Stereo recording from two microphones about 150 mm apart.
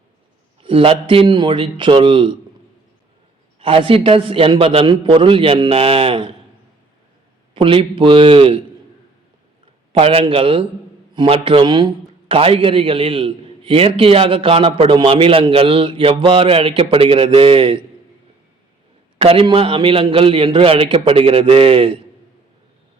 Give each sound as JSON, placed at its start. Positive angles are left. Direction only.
{"t": 0.6, "sound": "a man's voice", "side_deg": -35}
{"t": 3.6, "sound": "a man's voice", "side_deg": -35}
{"t": 7.5, "sound": "a man's voice", "side_deg": -35}
{"t": 10.0, "sound": "a man's voice", "side_deg": -40}
{"t": 19.2, "sound": "a man's voice", "side_deg": -40}